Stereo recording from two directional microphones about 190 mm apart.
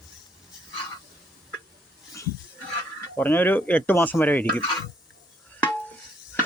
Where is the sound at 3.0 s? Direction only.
10° left (ahead or behind).